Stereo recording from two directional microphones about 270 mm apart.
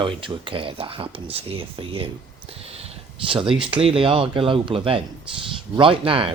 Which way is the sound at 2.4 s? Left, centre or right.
Right.